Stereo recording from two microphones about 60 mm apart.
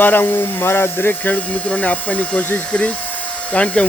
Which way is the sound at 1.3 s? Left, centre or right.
Left.